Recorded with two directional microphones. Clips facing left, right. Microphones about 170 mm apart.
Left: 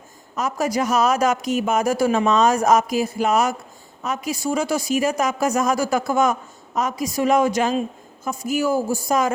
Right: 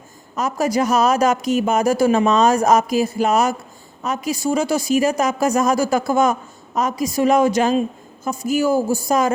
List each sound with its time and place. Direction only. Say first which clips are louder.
0.3 s a woman's voice: right 3 dB; 30° right (ahead or behind)